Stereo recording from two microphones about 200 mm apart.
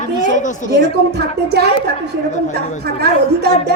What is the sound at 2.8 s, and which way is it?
Speech, 55° right (ahead or behind).